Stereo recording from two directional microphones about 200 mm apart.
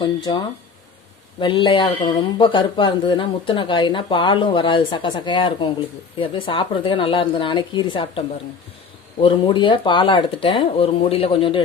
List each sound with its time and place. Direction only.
0.0 s speech: 20° left (ahead or behind)
9.2 s speech: 25° left (ahead or behind)